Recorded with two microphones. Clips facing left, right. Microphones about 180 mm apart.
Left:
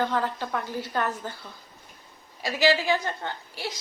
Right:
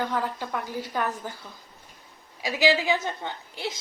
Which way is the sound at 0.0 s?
10° right (ahead or behind).